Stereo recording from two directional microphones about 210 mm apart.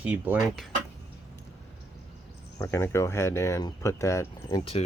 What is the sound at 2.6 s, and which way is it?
Speech, 15° left (ahead or behind).